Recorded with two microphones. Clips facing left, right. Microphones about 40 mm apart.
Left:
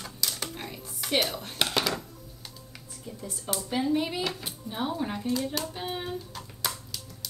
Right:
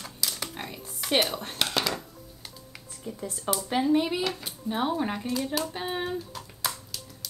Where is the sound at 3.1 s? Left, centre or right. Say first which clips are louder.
Right 5 dB; right.